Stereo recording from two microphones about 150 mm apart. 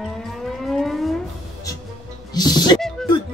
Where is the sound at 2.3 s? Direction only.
25° left (ahead or behind).